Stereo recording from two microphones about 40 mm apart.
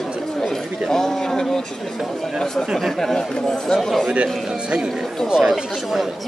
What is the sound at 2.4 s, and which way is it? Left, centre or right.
Speech, centre.